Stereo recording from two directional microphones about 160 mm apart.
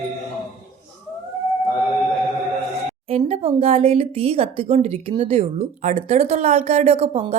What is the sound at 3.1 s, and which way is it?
A woman's voice, 40° right (ahead or behind).